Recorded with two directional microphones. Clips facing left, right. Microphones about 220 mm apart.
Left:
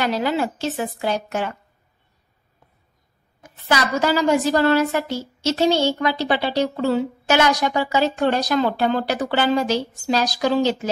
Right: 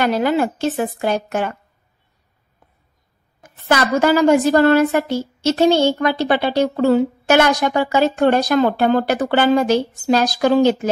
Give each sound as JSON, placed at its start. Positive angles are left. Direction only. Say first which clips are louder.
{"t": 0.0, "sound": "a woman's voice", "louder": "right 4 dB", "side_deg": -55}
{"t": 3.4, "sound": "a woman's voice", "louder": "right 4 dB", "side_deg": -50}